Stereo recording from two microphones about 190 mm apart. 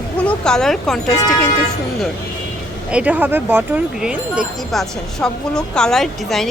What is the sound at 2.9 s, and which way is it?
Speech, 5° right (ahead or behind).